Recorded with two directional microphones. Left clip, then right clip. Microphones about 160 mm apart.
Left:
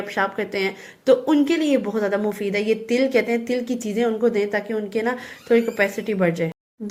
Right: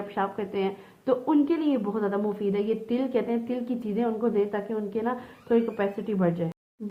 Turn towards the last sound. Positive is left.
turn(degrees=25)  # may be behind; listen again after turning